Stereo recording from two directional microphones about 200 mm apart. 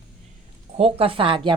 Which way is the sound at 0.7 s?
30° right (ahead or behind).